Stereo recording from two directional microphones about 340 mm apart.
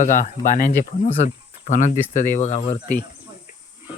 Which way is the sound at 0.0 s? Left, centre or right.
Left.